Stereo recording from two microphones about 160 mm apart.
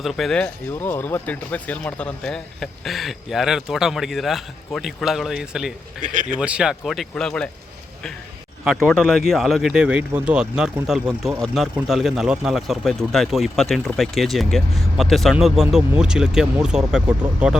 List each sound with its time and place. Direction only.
0.0 s speech: centre (ahead or behind)
6.0 s speech: 55° right (ahead or behind)
6.4 s speech: 5° right (ahead or behind)
8.6 s speech: centre (ahead or behind)